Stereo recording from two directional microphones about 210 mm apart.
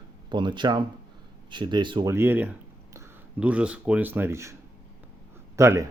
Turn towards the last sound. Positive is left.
turn(degrees=-15)  # may be behind; listen again after turning